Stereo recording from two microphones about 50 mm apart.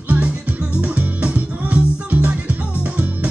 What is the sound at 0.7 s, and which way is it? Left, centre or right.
Music, right.